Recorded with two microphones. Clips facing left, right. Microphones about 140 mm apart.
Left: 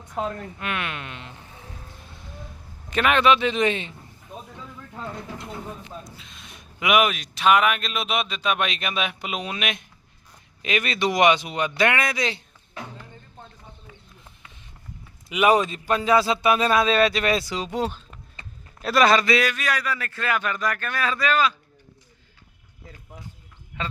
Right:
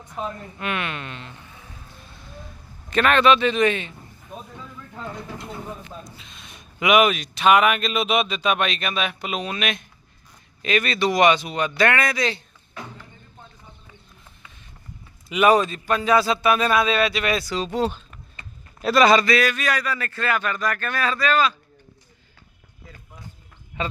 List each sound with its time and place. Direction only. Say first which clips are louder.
0.6 s speech: right 3 dB; centre (ahead or behind)
2.9 s speech: right 2 dB; 10° left (ahead or behind)
6.1 s speech: even; centre (ahead or behind)
8.6 s speech: right 2 dB; 15° left (ahead or behind)
15.3 s speech: right 2 dB; 15° left (ahead or behind); by 17.5 s 30° left (ahead or behind)
17.5 s speech: right 3 dB; 15° left (ahead or behind)
18.8 s speech: right 2 dB; centre (ahead or behind)
19.2 s speech: right 1 dB; 20° left (ahead or behind)
19.5 s speech: right 2 dB; 5° left (ahead or behind)